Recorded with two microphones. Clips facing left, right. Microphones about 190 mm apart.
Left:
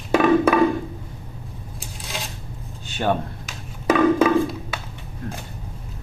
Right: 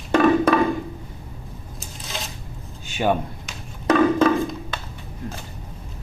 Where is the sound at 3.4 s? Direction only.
10° left (ahead or behind).